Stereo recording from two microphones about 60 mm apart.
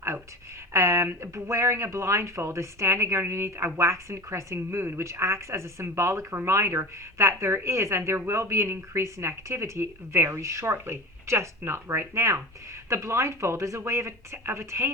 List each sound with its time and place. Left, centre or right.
0.7 s speech: right